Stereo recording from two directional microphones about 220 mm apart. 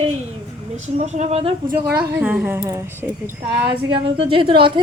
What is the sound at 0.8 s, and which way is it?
Speech, 30° right (ahead or behind).